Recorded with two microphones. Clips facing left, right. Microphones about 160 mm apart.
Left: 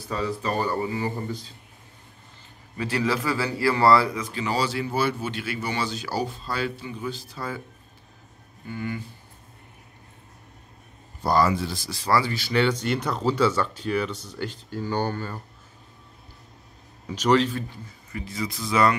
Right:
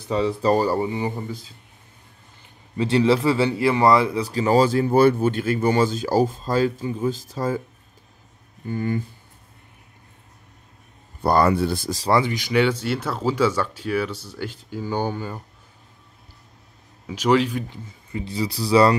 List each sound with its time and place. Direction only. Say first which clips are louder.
0.1 s speech: right 7 dB; 30° right (ahead or behind)
1.2 s speech: even; 10° right (ahead or behind)
2.8 s speech: right 7 dB; 25° right (ahead or behind)
4.1 s speech: right 8 dB; 35° right (ahead or behind)
8.6 s speech: right 7 dB; 45° right (ahead or behind)
11.2 s speech: right 4 dB; 60° right (ahead or behind)
12.1 s speech: right 3 dB; 20° right (ahead or behind)
17.1 s speech: right 2 dB; 10° right (ahead or behind); by 18.9 s 30° right (ahead or behind)